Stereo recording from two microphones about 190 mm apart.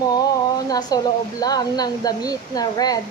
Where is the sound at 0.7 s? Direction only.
20° left (ahead or behind).